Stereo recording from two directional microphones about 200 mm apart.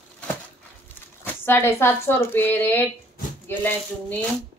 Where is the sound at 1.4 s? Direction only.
10° left (ahead or behind).